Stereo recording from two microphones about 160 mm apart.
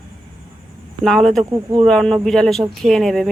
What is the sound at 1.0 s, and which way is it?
Speech, 5° left (ahead or behind).